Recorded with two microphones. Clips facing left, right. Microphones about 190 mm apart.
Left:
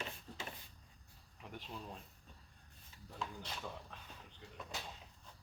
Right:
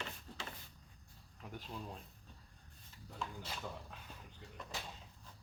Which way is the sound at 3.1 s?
5° right (ahead or behind).